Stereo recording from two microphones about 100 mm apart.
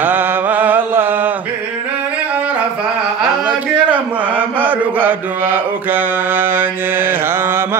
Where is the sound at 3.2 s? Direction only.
15° right (ahead or behind).